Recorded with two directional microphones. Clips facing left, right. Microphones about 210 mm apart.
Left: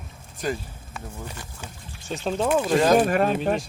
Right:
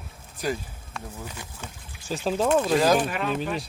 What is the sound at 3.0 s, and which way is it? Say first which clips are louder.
Speech: left 7 dB; 45° left (ahead or behind).